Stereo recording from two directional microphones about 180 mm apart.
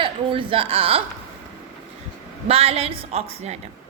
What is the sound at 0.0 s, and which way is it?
A woman's voice, 30° right (ahead or behind).